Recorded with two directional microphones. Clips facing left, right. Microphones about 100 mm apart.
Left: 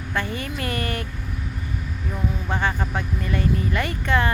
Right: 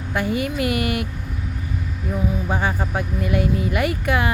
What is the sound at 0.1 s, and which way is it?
Speech, 10° right (ahead or behind).